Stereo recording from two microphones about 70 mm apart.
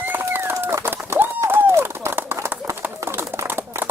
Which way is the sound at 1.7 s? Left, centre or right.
Right.